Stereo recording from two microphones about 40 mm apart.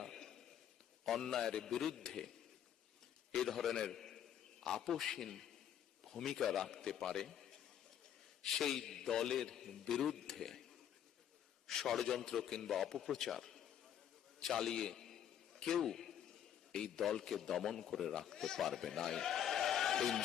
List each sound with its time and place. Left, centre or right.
0.0 s a sound: centre
1.0 s a man's voice: centre
3.3 s a man's voice: centre
11.7 s a man's voice: centre
14.4 s a sound: centre
17.0 s a man's voice: centre